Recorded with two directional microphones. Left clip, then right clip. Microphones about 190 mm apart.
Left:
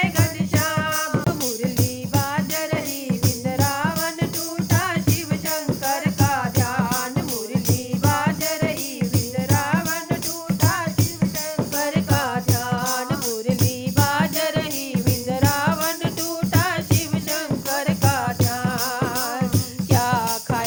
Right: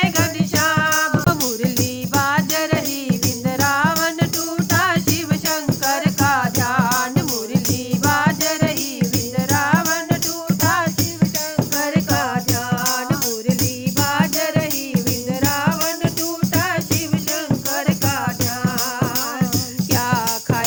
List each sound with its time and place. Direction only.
0.0 s music: 25° right (ahead or behind)
8.1 s music: 25° right (ahead or behind)
11.8 s music: 15° right (ahead or behind)
19.9 s music: 15° right (ahead or behind)